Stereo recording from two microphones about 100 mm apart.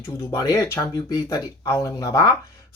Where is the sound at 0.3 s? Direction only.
30° left (ahead or behind).